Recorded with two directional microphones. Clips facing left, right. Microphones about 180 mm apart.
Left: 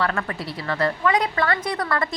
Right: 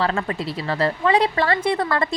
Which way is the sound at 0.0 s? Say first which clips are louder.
Right 3 dB; 25° right (ahead or behind).